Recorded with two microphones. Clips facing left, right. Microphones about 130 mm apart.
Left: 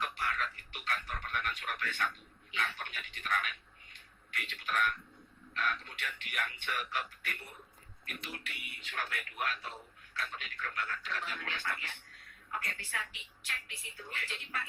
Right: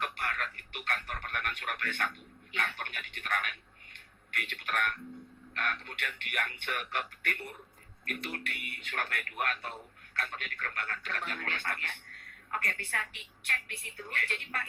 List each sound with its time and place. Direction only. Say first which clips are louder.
0.0 s radio: even; 60° right (ahead or behind)
2.5 s a sound: right 1 dB; 60° right (ahead or behind)
5.5 s speech: even; 60° right (ahead or behind)